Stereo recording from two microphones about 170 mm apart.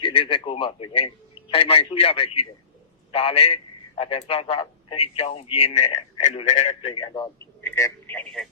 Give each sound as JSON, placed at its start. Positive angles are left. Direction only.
{"t": 0.0, "sound": "a man's voice", "side_deg": 35}
{"t": 7.1, "sound": "a man's voice", "side_deg": 20}